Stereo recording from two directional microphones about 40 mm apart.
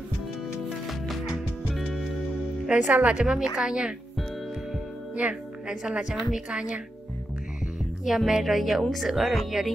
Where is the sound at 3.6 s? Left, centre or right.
Centre.